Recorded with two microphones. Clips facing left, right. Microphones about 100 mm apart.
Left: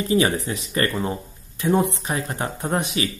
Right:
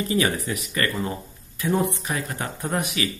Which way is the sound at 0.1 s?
25° left (ahead or behind).